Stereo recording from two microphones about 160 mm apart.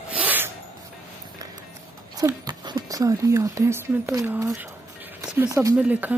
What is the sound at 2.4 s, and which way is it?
Speech, 25° right (ahead or behind).